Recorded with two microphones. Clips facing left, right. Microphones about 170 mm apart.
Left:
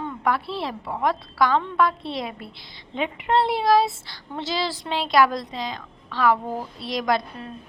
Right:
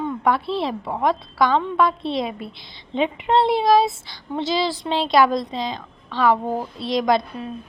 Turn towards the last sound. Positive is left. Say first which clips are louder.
# right 4 dB
turn(degrees=-20)  # may be behind; listen again after turning